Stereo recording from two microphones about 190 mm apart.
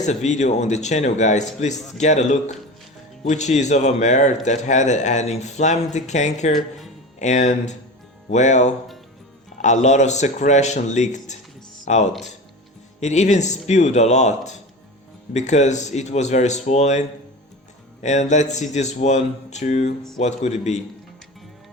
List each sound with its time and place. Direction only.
0.0 s speech: 35° left (ahead or behind)
6.6 s a sound: centre (ahead or behind)
7.2 s speech: 40° left (ahead or behind)
18.0 s speech: 40° left (ahead or behind)